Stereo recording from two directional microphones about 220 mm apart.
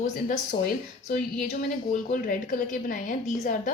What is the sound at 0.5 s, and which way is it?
A woman's voice, 35° left (ahead or behind).